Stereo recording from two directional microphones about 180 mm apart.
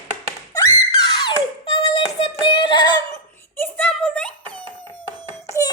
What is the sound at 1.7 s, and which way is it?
Female singing, 30° left (ahead or behind).